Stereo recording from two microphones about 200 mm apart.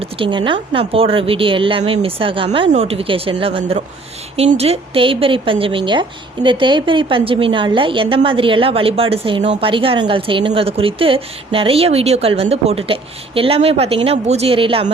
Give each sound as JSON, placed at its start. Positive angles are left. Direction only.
{"t": 0.0, "sound": "a woman's voice", "side_deg": -25}